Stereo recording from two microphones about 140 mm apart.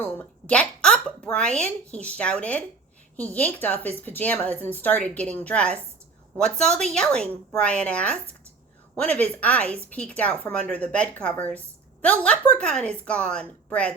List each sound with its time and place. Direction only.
0.0 s a woman's voice: 10° left (ahead or behind)